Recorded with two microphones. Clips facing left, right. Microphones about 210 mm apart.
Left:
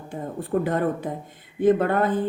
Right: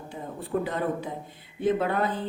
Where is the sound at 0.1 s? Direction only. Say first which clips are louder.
Left 5 dB; 50° left (ahead or behind).